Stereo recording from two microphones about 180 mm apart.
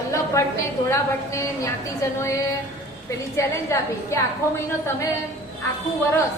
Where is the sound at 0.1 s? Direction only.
15° left (ahead or behind).